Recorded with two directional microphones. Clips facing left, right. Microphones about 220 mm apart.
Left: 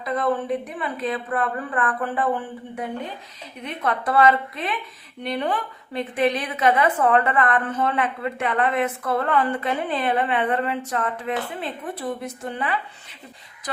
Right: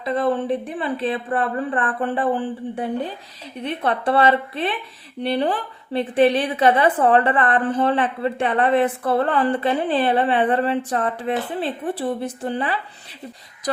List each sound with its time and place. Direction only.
0.0 s a woman's voice: 30° right (ahead or behind)